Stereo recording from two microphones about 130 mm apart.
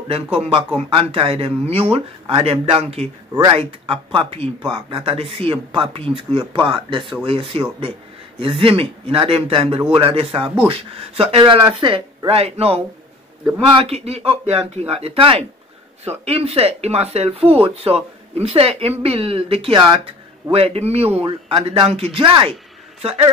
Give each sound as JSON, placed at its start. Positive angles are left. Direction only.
{"t": 0.7, "sound": "speech", "side_deg": -45}